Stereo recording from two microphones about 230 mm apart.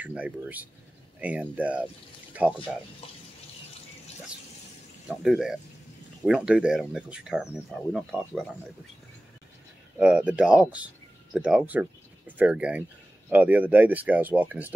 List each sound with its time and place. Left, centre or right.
0.0 s speech: centre
5.0 s speech: centre
9.9 s speech: centre